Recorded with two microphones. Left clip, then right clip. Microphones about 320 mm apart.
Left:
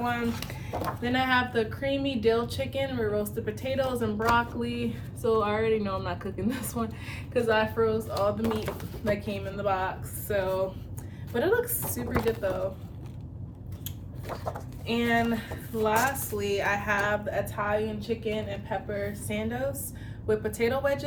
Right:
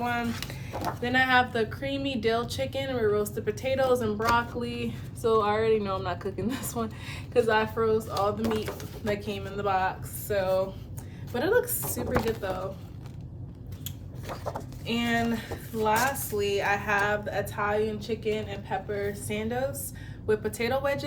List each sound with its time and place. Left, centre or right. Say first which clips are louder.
0.0 s a woman's voice: even; centre
14.4 s a woman's voice: right 1 dB; centre